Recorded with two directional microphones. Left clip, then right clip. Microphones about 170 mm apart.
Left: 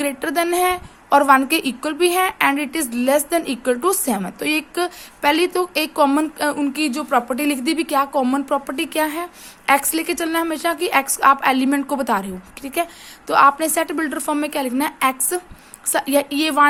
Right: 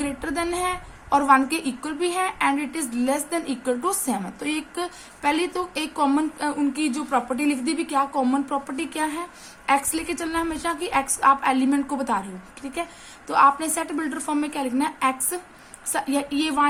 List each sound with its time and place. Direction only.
0.0 s a woman's voice: 50° left (ahead or behind)